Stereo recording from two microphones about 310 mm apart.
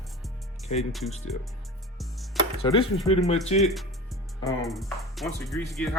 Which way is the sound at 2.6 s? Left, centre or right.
Centre.